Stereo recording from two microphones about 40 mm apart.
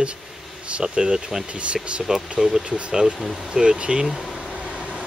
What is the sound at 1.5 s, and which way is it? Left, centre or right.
Speech, right.